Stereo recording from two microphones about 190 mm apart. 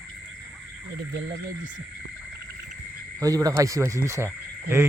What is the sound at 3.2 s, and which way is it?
Speech, 20° right (ahead or behind).